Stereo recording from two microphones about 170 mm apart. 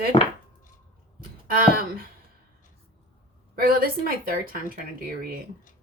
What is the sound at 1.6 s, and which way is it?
Speech, 60° right (ahead or behind).